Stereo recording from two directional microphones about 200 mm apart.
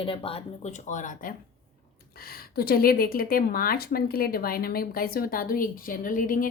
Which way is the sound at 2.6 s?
50° left (ahead or behind).